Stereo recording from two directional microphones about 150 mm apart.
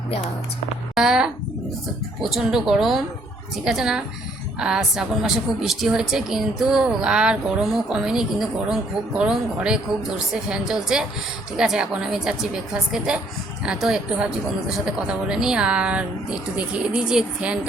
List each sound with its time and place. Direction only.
0.9 s a woman's voice: 5° right (ahead or behind)